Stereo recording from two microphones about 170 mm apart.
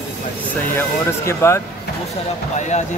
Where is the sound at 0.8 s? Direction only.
15° left (ahead or behind).